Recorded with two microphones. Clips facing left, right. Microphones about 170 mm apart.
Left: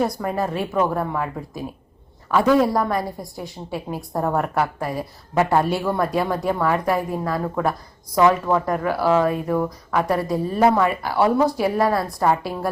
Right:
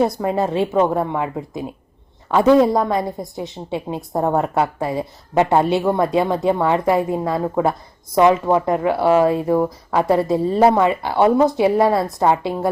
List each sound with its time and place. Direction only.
0.0 s a woman's voice: 25° right (ahead or behind)